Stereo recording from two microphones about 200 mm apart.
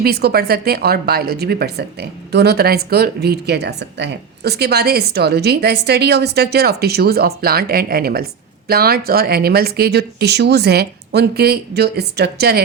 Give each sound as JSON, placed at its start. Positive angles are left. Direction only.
{"t": 0.0, "sound": "a woman's voice", "side_deg": -50}